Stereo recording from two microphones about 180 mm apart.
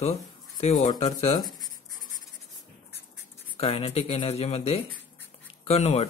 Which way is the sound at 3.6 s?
35° left (ahead or behind).